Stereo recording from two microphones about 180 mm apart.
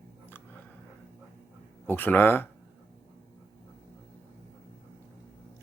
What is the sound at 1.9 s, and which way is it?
Speech, 10° left (ahead or behind).